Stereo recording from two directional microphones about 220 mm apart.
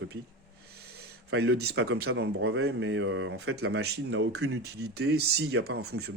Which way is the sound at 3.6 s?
50° right (ahead or behind).